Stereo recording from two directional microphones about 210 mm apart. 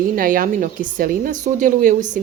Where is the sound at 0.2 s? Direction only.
40° right (ahead or behind).